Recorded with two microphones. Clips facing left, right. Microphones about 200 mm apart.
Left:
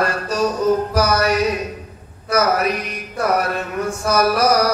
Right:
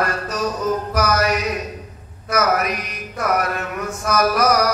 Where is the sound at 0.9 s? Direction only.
30° left (ahead or behind).